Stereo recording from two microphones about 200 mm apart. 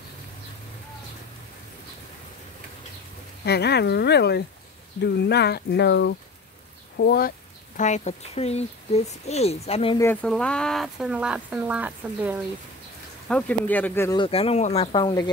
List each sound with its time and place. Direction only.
3.4 s speech: 55° left (ahead or behind); by 9.9 s 30° left (ahead or behind)
10.2 s speech: 5° left (ahead or behind)
13.3 s speech: 10° left (ahead or behind)
14.1 s speech: 25° left (ahead or behind)